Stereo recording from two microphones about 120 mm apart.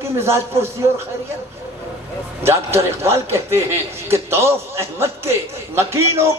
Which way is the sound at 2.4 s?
20° right (ahead or behind).